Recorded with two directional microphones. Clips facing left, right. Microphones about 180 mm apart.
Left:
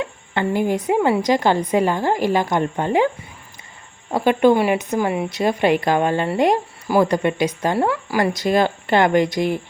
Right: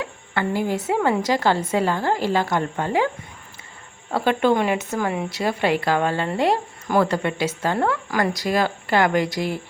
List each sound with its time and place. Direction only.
0.0 s a sound: 20° left (ahead or behind)
0.9 s a woman's voice: 15° left (ahead or behind)
4.1 s a woman's voice: 15° left (ahead or behind)